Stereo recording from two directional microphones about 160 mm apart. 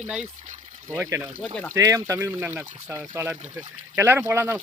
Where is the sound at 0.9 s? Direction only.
15° right (ahead or behind).